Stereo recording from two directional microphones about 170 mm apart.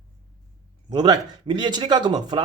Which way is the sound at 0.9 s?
25° right (ahead or behind).